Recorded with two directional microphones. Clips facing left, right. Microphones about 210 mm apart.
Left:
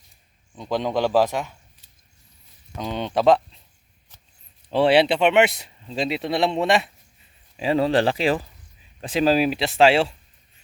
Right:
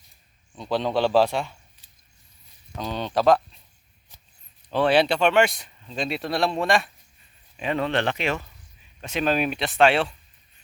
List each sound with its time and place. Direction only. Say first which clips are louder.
0.5 s a man's voice: even; 15° left (ahead or behind)
2.7 s speech: left 1 dB; 20° left (ahead or behind)
4.7 s speech: left 3 dB; 25° left (ahead or behind)